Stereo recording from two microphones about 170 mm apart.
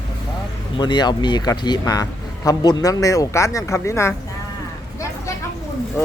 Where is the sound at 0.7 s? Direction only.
25° left (ahead or behind).